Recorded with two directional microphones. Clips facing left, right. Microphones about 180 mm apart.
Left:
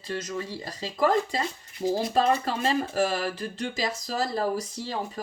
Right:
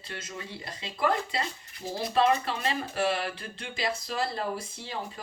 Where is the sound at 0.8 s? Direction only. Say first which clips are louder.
Left 5 dB; 40° left (ahead or behind).